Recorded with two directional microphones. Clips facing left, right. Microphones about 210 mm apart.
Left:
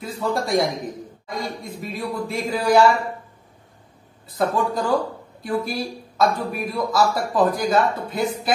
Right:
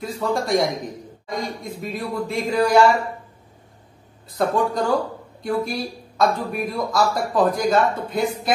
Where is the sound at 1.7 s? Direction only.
Centre (ahead or behind).